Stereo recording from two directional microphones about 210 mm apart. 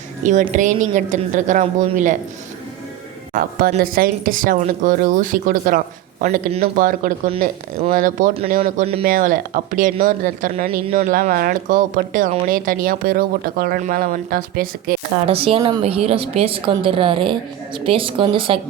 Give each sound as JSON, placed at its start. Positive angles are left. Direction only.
{"t": 0.2, "sound": "a woman's voice", "side_deg": -35}
{"t": 3.3, "sound": "a woman's voice", "side_deg": -40}
{"t": 8.6, "sound": "a woman's voice", "side_deg": -30}
{"t": 9.0, "sound": "a woman's voice", "side_deg": -40}
{"t": 15.3, "sound": "a woman's voice", "side_deg": -25}